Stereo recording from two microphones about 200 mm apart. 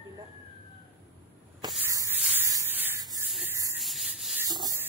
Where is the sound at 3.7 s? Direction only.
Centre (ahead or behind).